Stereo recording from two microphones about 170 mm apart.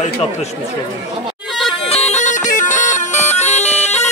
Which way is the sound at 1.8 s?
40° left (ahead or behind).